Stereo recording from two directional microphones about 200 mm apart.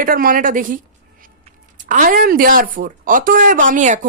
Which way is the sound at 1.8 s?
40° right (ahead or behind).